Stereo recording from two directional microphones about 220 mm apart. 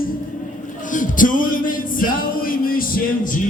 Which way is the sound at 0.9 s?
35° left (ahead or behind).